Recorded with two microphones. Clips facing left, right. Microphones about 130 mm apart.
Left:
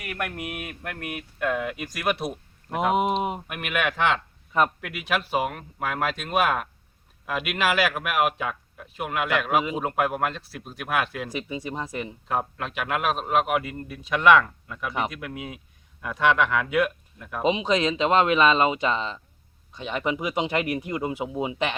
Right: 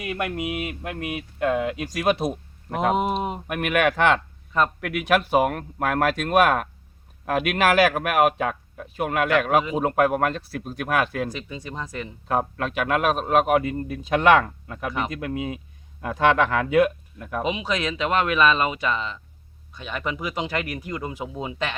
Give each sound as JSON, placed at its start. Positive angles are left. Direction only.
{"t": 0.0, "sound": "speech", "side_deg": -20}
{"t": 3.4, "sound": "a man's voice", "side_deg": -45}
{"t": 11.3, "sound": "speech", "side_deg": 15}
{"t": 12.3, "sound": "a man's voice", "side_deg": -45}
{"t": 17.2, "sound": "a man's voice", "side_deg": -55}
{"t": 17.4, "sound": "speech", "side_deg": 25}